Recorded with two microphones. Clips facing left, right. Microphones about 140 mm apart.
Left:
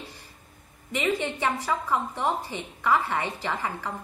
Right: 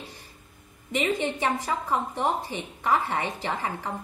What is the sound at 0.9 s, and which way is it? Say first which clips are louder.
A woman's voice: right 1 dB; 20° right (ahead or behind).